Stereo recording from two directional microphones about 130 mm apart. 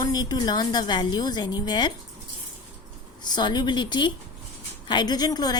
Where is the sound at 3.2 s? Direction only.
35° left (ahead or behind).